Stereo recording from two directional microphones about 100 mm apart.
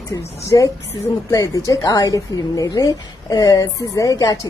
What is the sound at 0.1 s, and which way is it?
Speech, 35° left (ahead or behind).